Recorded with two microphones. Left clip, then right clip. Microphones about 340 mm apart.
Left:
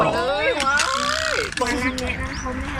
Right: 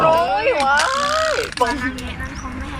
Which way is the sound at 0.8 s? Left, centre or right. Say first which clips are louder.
Right 4 dB; centre.